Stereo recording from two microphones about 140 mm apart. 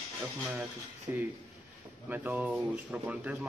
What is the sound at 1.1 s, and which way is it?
A man's voice, 20° right (ahead or behind).